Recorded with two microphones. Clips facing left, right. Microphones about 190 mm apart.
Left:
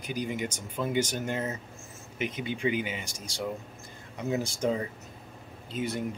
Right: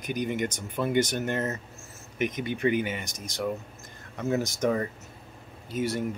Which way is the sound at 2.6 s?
55° right (ahead or behind).